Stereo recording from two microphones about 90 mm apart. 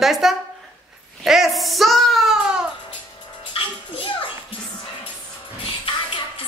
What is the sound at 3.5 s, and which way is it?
Music, 90° left.